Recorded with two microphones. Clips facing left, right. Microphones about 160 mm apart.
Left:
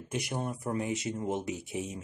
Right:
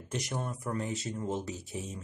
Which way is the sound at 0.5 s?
15° left (ahead or behind).